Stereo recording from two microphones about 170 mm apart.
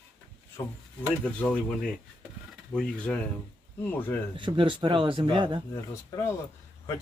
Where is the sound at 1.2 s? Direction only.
10° left (ahead or behind).